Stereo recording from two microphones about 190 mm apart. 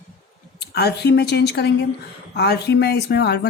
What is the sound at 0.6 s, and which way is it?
Speech, 60° left (ahead or behind).